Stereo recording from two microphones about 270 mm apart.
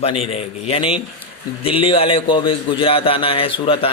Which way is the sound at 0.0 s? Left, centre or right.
Left.